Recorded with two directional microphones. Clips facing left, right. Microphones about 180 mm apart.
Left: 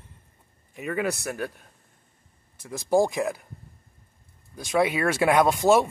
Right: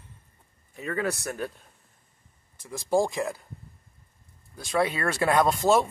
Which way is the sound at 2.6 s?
20° left (ahead or behind).